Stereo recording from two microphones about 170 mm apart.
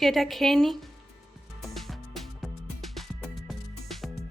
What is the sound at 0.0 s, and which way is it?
Speech, centre (ahead or behind).